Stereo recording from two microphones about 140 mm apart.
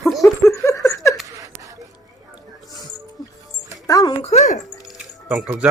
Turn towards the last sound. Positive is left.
turn(degrees=-10)  # may be behind; listen again after turning